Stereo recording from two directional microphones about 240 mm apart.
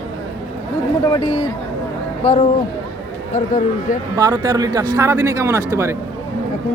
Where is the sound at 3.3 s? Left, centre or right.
Left.